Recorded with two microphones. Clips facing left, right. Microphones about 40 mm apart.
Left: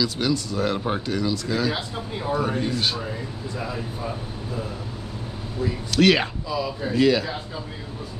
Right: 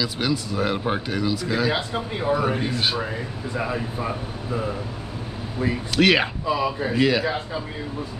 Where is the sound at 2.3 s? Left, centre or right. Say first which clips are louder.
Right 1 dB; centre.